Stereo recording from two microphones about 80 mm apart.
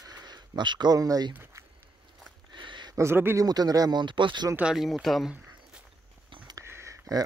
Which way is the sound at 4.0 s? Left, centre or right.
Right.